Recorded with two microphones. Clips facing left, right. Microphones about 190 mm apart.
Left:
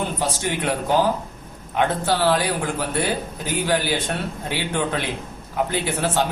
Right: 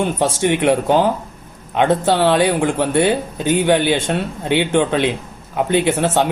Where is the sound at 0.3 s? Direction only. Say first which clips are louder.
Right 9 dB; 25° right (ahead or behind).